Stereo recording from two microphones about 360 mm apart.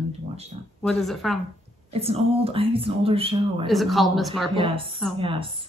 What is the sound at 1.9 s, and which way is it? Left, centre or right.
Speech, centre.